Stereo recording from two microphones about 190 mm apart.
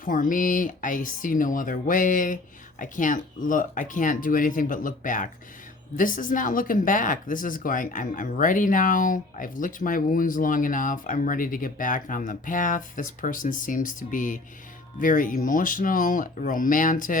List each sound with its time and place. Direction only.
0.0 s speech: 45° left (ahead or behind)